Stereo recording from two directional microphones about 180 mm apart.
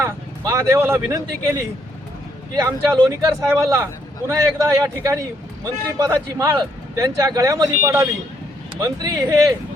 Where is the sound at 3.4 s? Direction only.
15° right (ahead or behind).